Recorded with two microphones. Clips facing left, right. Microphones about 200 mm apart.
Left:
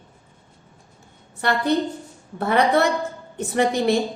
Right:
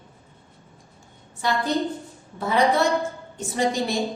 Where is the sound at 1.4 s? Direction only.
60° left (ahead or behind).